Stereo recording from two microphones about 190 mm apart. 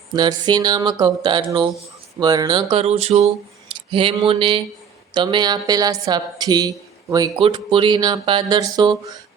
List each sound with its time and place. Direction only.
0.1 s a woman's voice: 20° right (ahead or behind)